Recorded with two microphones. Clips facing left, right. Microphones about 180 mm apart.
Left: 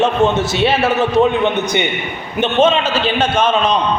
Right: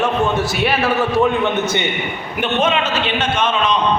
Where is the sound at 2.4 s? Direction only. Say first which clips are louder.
Left 5 dB; 30° left (ahead or behind).